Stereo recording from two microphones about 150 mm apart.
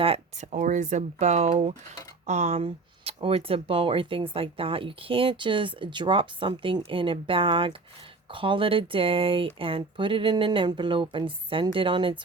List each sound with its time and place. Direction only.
0.0 s speech: 40° right (ahead or behind)
0.5 s speech: 60° right (ahead or behind); by 12.1 s 35° right (ahead or behind)